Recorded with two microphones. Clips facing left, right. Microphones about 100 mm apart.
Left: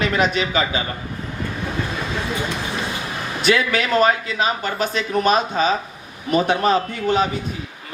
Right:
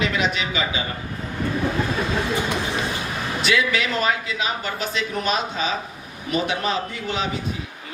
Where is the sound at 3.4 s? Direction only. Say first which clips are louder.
Left 3 dB; 45° left (ahead or behind).